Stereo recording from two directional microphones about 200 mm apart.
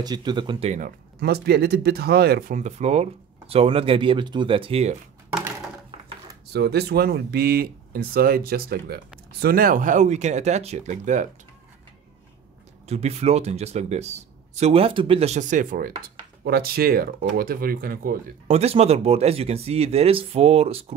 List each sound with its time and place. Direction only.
0.0 s speech: 20° right (ahead or behind)
0.7 s speech: 50° right (ahead or behind); by 4.9 s 30° right (ahead or behind)
6.5 s speech: 55° right (ahead or behind); by 11.2 s 35° right (ahead or behind)
12.8 s speech: 30° right (ahead or behind)
18.5 s speech: 30° right (ahead or behind)